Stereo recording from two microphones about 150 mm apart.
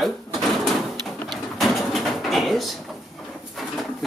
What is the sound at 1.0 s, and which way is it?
Bird, centre (ahead or behind).